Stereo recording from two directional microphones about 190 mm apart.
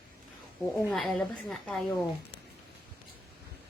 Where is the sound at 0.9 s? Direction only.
Centre (ahead or behind).